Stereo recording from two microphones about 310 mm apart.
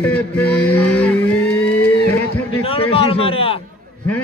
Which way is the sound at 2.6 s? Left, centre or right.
Centre.